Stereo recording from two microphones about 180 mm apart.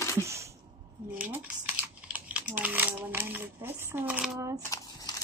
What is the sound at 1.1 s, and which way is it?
Speech, 10° right (ahead or behind).